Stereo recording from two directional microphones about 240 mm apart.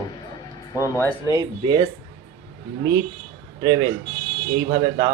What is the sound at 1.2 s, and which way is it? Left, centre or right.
Speech, centre.